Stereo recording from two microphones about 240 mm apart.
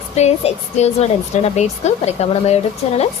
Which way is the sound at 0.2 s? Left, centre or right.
Left.